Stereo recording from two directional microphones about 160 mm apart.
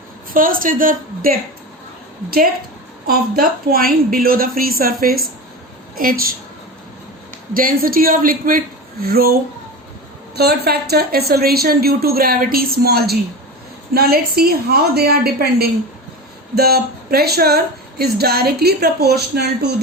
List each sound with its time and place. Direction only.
0.3 s a woman's voice: 60° right (ahead or behind)
3.1 s a woman's voice: 65° right (ahead or behind)
7.5 s a woman's voice: 65° right (ahead or behind); by 19.7 s 90° right